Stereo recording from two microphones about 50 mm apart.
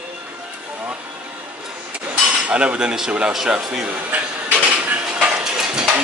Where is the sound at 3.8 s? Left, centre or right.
Right.